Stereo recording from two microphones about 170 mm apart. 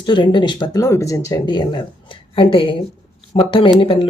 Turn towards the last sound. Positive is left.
turn(degrees=30)  # may be behind; listen again after turning